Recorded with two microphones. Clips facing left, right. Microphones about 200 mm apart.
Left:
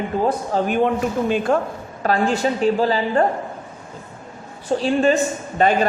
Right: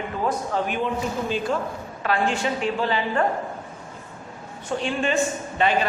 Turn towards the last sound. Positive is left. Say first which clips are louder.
# left 4 dB
turn(degrees=45)  # may be behind; listen again after turning